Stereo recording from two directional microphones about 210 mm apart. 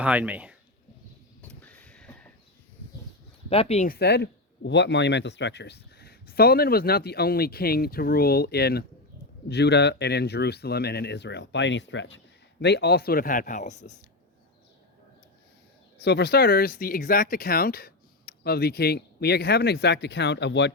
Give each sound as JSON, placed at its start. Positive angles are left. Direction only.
{"t": 0.0, "sound": "speech", "side_deg": -5}
{"t": 1.4, "sound": "a sound", "side_deg": 5}
{"t": 3.5, "sound": "speech", "side_deg": 30}
{"t": 3.8, "sound": "speech", "side_deg": 50}
{"t": 16.0, "sound": "speech", "side_deg": 50}